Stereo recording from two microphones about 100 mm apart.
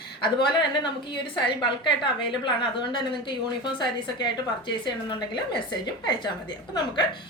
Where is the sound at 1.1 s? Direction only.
55° left (ahead or behind).